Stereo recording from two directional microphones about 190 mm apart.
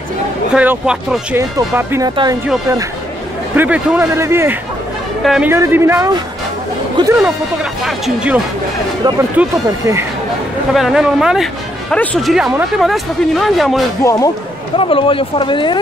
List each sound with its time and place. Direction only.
0.6 s speech: 5° right (ahead or behind); by 2.3 s 20° right (ahead or behind)
3.5 s speech: 5° right (ahead or behind)
5.2 s speech: centre (ahead or behind)
5.5 s speech: 15° right (ahead or behind)
7.8 s speech: 5° right (ahead or behind)
9.4 s speech: 15° right (ahead or behind)
10.7 s speech: centre (ahead or behind)
14.0 s speech: 20° left (ahead or behind)
14.8 s speech: 30° left (ahead or behind)